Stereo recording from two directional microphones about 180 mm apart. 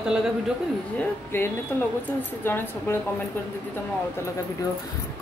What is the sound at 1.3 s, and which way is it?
Speech, 10° left (ahead or behind).